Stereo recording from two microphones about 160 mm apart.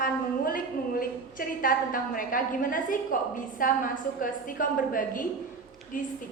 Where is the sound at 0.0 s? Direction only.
60° left (ahead or behind).